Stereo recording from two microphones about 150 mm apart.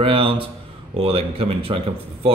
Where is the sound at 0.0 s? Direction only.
35° right (ahead or behind).